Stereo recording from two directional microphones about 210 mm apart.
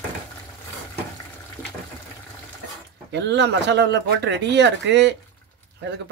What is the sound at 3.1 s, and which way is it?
Speech, 55° right (ahead or behind).